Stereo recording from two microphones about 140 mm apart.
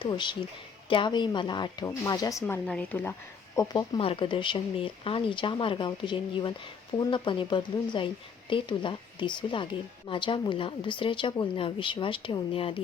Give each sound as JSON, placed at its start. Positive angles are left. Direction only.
{"t": 0.0, "sound": "speech", "side_deg": 35}
{"t": 2.6, "sound": "speech", "side_deg": 10}